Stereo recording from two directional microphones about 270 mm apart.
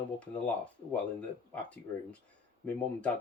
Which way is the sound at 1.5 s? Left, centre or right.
Centre.